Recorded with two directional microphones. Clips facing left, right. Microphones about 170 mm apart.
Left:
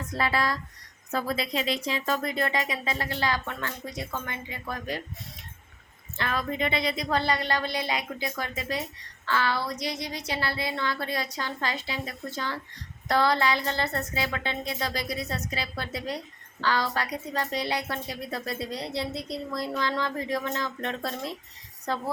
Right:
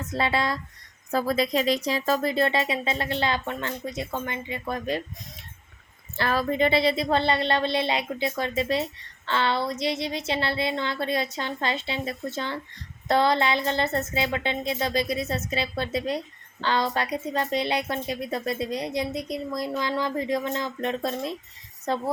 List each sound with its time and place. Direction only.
0.0 s a woman's voice: 25° right (ahead or behind)
1.1 s a woman's voice: 40° right (ahead or behind); by 4.9 s 25° right (ahead or behind)
6.1 s a woman's voice: 35° right (ahead or behind); by 22.0 s 20° right (ahead or behind)